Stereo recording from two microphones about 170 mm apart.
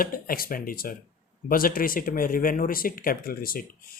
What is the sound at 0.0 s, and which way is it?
Speech, 60° left (ahead or behind).